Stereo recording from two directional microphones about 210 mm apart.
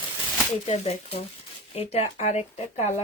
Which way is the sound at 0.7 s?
30° left (ahead or behind).